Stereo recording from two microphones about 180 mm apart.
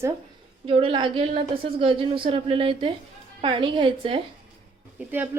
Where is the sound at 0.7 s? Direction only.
30° right (ahead or behind).